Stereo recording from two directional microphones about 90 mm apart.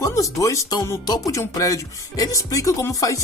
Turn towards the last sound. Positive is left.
turn(degrees=40)  # may be behind; listen again after turning